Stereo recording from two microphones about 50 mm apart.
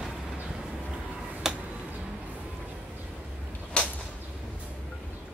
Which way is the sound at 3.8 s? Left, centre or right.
Left.